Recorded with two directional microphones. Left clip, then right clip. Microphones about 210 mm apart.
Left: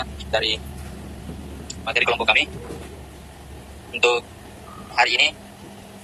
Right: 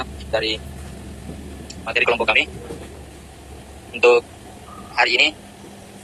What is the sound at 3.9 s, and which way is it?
Speech, 50° left (ahead or behind).